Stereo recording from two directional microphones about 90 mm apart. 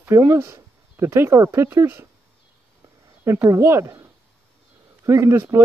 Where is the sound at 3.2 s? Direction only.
30° right (ahead or behind).